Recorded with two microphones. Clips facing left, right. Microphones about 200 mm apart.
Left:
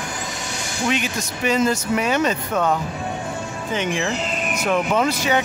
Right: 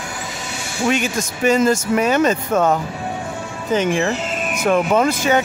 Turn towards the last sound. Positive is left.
turn(degrees=-50)  # may be behind; listen again after turning